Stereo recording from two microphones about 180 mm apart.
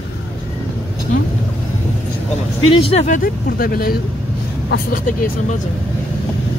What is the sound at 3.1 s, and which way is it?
Speech, 50° left (ahead or behind).